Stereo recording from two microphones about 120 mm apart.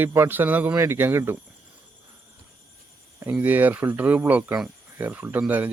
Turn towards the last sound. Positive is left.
turn(degrees=-15)  # may be behind; listen again after turning